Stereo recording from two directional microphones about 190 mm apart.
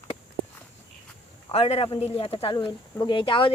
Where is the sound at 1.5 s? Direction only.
30° left (ahead or behind).